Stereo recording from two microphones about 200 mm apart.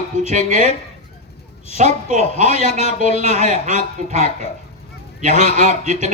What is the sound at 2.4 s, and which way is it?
Speech, 30° left (ahead or behind).